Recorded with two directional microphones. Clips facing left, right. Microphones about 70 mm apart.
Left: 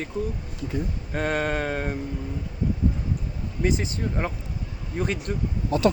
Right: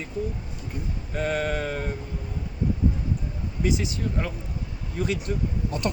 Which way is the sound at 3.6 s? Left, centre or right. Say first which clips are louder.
Left 1 dB; left.